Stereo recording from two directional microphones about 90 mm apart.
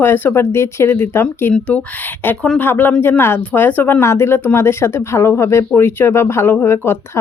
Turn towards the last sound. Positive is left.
turn(degrees=25)  # may be behind; listen again after turning